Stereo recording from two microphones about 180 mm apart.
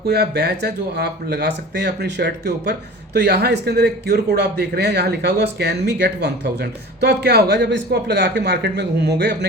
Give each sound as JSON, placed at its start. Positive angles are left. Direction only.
{"t": 0.1, "sound": "speech", "side_deg": -65}